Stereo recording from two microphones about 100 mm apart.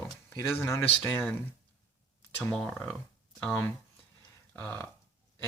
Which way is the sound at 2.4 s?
5° left (ahead or behind).